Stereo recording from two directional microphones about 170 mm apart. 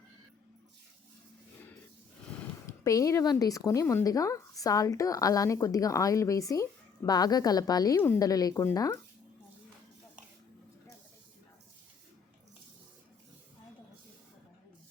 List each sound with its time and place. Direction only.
2.6 s speech: 20° left (ahead or behind)